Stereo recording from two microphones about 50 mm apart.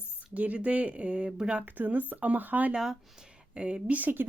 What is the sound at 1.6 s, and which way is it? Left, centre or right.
Speech, right.